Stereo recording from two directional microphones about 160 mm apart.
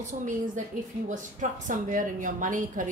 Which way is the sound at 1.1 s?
55° right (ahead or behind).